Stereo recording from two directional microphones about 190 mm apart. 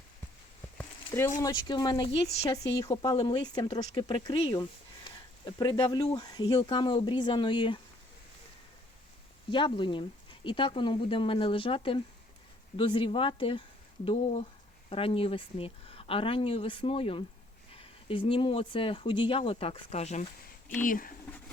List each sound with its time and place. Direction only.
0.8 s a sound: 15° left (ahead or behind)
1.4 s speech: 20° left (ahead or behind)
9.5 s speech: 25° left (ahead or behind)
20.8 s speech: 45° left (ahead or behind)